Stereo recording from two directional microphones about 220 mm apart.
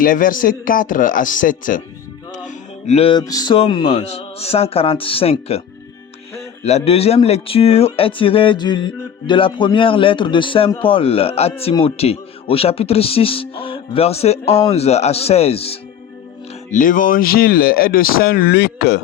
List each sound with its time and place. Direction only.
0.0 s speech: 40° left (ahead or behind)